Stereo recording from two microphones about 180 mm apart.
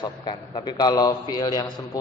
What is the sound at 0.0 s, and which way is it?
A man's voice, 25° left (ahead or behind).